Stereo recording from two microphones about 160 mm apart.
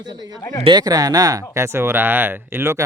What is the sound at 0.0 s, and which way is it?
Speech, 25° right (ahead or behind).